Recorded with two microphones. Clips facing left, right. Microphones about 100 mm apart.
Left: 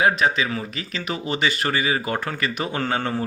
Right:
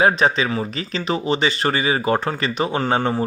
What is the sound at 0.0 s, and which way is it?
Speech, 35° right (ahead or behind).